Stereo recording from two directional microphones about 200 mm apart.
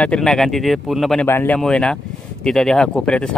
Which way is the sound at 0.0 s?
5° left (ahead or behind).